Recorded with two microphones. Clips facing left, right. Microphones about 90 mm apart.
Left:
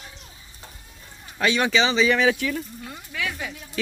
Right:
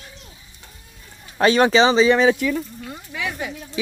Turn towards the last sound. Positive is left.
turn(degrees=-15)  # may be behind; listen again after turning